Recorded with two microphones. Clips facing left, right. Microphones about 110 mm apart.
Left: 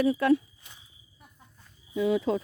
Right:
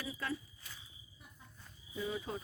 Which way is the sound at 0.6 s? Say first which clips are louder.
Left 1 dB; 20° left (ahead or behind).